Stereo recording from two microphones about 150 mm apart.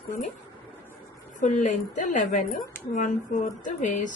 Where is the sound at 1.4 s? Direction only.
55° left (ahead or behind).